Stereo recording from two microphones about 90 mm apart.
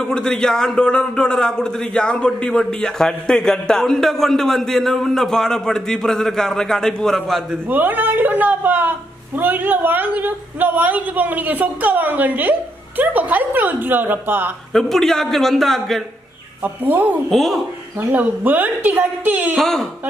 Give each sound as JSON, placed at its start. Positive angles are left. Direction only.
{"t": 0.0, "sound": "a man's voice", "side_deg": 10}
{"t": 7.7, "sound": "a woman's voice", "side_deg": -20}
{"t": 14.7, "sound": "speech", "side_deg": 5}
{"t": 16.6, "sound": "a woman's voice", "side_deg": -20}
{"t": 17.3, "sound": "speech", "side_deg": 5}
{"t": 18.1, "sound": "a woman's voice", "side_deg": -20}
{"t": 19.5, "sound": "speech", "side_deg": 5}